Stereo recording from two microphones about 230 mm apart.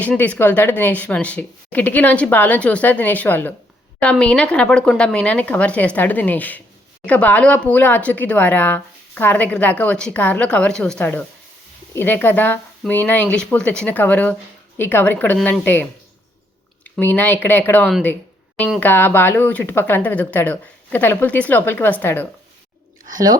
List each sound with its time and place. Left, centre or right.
0.0 s speech: centre
23.1 s speech: centre